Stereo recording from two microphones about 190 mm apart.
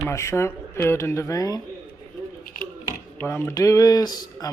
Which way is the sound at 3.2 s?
10° left (ahead or behind).